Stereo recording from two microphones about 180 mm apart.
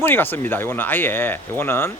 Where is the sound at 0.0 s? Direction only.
10° left (ahead or behind).